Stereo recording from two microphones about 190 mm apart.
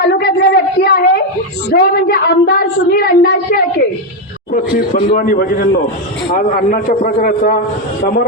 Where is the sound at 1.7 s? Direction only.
55° left (ahead or behind).